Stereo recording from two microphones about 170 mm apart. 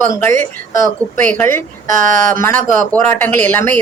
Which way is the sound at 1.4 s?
10° left (ahead or behind).